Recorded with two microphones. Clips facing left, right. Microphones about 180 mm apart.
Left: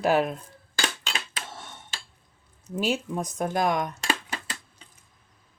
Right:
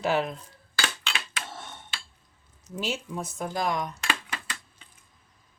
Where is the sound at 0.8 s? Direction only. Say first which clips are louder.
Left 1 dB; 40° left (ahead or behind).